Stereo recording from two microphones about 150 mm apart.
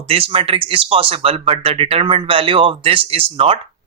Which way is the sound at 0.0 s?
40° right (ahead or behind).